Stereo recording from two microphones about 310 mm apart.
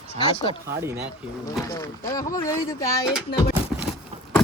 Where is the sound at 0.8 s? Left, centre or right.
Centre.